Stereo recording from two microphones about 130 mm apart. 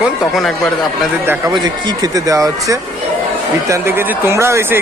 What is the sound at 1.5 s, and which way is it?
Speech, 30° right (ahead or behind).